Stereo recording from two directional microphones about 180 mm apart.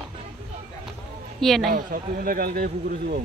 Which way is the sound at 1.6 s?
50° right (ahead or behind).